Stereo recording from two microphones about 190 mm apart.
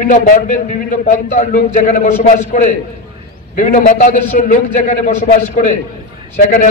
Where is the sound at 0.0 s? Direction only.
45° left (ahead or behind).